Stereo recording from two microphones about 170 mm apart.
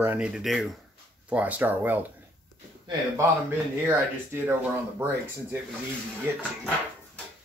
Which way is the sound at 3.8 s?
10° right (ahead or behind).